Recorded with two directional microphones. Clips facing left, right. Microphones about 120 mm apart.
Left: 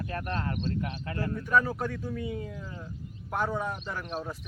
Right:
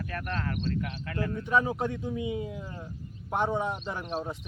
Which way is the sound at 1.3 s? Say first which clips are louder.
Left 1 dB; 20° right (ahead or behind).